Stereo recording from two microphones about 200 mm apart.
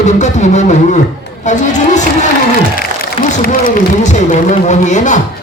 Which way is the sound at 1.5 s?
35° left (ahead or behind).